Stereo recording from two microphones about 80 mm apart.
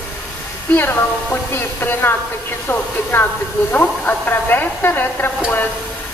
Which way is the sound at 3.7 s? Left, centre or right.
Left.